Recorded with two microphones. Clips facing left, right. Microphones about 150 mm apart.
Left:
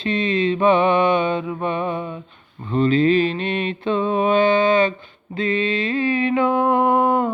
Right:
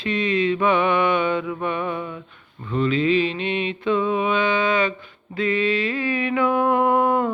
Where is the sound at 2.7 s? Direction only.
35° left (ahead or behind).